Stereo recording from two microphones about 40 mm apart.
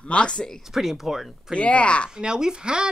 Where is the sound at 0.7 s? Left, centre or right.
Centre.